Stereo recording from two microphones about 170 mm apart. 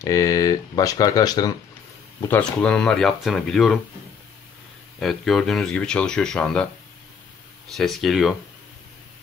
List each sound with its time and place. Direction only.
0.0 s speech: 20° left (ahead or behind)
2.2 s speech: 10° left (ahead or behind)
5.0 s speech: centre (ahead or behind)